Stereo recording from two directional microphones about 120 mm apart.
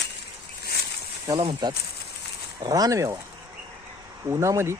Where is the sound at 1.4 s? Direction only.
45° right (ahead or behind).